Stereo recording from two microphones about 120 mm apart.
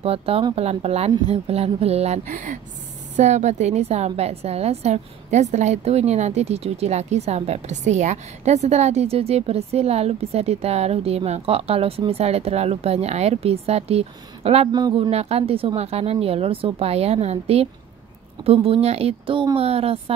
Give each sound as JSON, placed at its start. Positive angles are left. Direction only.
{"t": 0.0, "sound": "a woman's voice", "side_deg": -55}
{"t": 3.2, "sound": "a woman's voice", "side_deg": -75}
{"t": 14.7, "sound": "speech", "side_deg": -35}
{"t": 15.0, "sound": "a woman's voice", "side_deg": -60}